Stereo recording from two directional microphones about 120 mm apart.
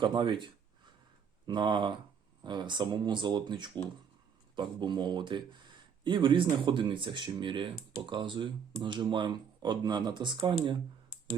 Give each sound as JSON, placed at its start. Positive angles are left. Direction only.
{"t": 0.0, "sound": "a man's voice", "side_deg": -40}